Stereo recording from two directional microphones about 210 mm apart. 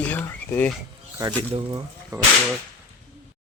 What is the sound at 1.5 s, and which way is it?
Speech, 20° right (ahead or behind).